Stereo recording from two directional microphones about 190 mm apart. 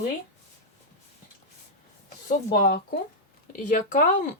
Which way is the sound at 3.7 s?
40° left (ahead or behind).